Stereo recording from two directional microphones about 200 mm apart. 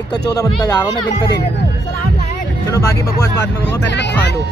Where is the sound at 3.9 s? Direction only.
60° left (ahead or behind).